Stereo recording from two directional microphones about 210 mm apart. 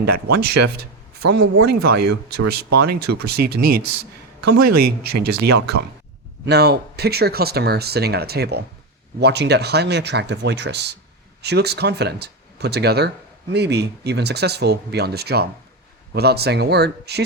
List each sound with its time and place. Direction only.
0.0 s speech: 50° right (ahead or behind)